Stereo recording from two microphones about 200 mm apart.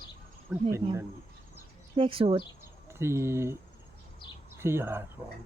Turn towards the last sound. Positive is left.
turn(degrees=-10)  # may be behind; listen again after turning